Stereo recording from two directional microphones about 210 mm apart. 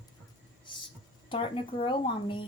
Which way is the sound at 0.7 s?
25° left (ahead or behind).